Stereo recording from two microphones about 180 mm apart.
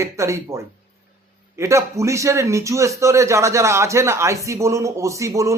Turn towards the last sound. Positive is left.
turn(degrees=-15)  # may be behind; listen again after turning